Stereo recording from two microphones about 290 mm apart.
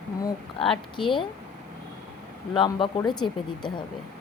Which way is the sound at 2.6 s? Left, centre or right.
Centre.